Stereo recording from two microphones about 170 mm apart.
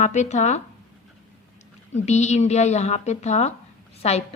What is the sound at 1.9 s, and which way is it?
A woman's voice, 40° left (ahead or behind).